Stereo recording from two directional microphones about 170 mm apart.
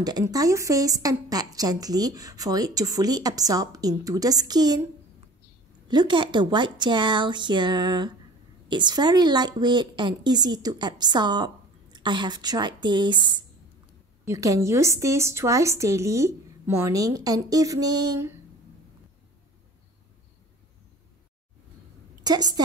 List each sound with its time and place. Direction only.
0.0 s a woman's voice: 20° right (ahead or behind)
5.9 s a woman's voice: 25° right (ahead or behind)
22.2 s a woman's voice: 25° right (ahead or behind)